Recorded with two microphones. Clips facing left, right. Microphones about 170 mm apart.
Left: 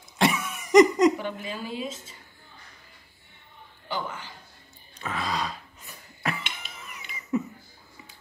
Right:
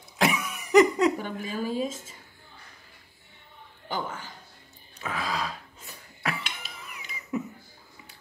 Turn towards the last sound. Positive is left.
turn(degrees=0)  # may be behind; listen again after turning